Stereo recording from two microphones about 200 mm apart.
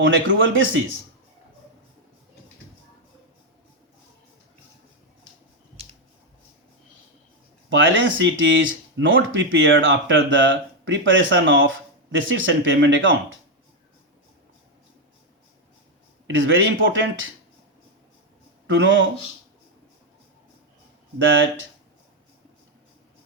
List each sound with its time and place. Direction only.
0.0 s speech: 70° right (ahead or behind)
7.7 s speech: 70° right (ahead or behind)
16.2 s speech: 70° right (ahead or behind)
18.7 s speech: 65° right (ahead or behind)